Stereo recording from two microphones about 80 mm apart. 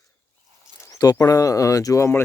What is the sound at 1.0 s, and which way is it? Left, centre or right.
Speech, left.